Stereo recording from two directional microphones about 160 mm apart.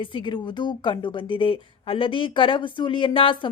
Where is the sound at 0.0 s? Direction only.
30° left (ahead or behind).